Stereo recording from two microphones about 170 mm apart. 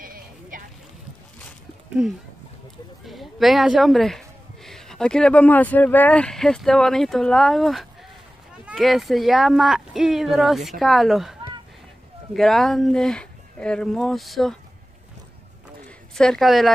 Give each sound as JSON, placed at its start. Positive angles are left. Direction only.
{"t": 0.0, "sound": "a sound", "side_deg": -55}
{"t": 3.1, "sound": "a woman's voice", "side_deg": 0}
{"t": 12.4, "sound": "speech", "side_deg": 0}
{"t": 16.2, "sound": "speech", "side_deg": 0}